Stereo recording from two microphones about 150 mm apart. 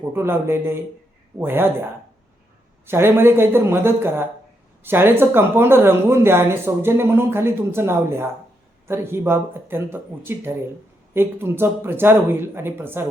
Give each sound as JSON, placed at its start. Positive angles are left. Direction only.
{"t": 0.2, "sound": "speech", "side_deg": -15}
{"t": 2.8, "sound": "speech", "side_deg": -15}